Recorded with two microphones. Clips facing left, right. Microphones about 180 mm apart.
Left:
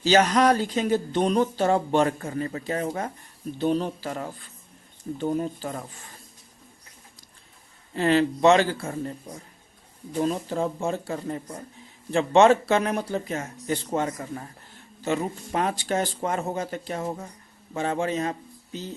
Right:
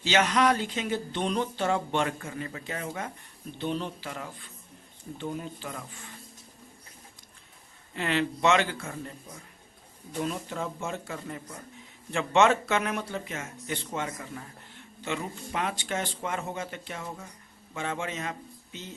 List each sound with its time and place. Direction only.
0.0 s speech: 40° left (ahead or behind)
7.9 s speech: 35° left (ahead or behind)